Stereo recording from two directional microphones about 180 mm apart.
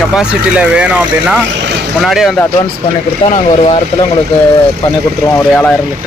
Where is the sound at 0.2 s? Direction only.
5° right (ahead or behind).